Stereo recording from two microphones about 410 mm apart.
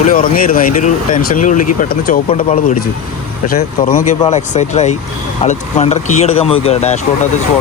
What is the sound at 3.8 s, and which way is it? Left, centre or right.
Speech, centre.